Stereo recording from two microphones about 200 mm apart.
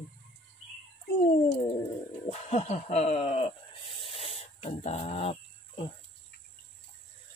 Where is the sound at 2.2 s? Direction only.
35° left (ahead or behind).